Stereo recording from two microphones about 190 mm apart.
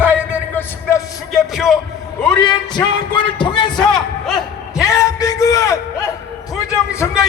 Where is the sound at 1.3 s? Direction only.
Centre (ahead or behind).